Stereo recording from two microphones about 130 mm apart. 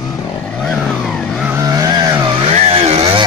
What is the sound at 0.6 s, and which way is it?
Vehicle, 5° left (ahead or behind).